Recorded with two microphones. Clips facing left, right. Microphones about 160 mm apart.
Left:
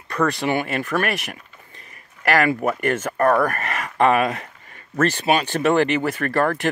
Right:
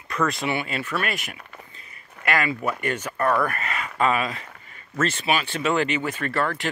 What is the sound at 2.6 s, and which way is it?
Speech, 50° left (ahead or behind).